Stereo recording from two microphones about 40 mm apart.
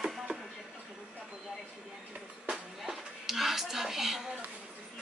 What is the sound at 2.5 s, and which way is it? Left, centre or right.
Music, centre.